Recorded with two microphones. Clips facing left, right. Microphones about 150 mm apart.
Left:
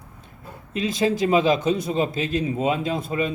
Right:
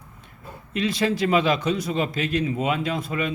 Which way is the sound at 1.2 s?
45° left (ahead or behind).